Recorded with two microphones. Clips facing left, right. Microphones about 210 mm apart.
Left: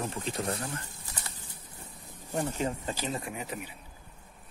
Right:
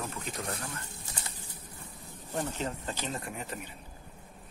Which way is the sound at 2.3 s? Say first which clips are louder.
Left 3 dB; 10° left (ahead or behind).